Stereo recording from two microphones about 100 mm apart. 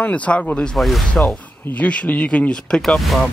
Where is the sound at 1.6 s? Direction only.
15° left (ahead or behind).